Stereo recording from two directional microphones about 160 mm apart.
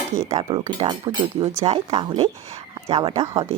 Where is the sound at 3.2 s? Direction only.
20° right (ahead or behind).